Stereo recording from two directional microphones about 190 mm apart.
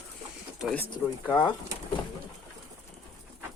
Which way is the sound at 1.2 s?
25° left (ahead or behind).